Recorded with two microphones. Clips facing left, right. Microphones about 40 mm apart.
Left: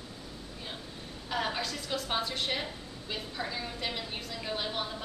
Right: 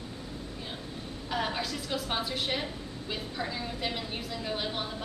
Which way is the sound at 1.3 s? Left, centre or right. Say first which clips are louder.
Right 1 dB; centre.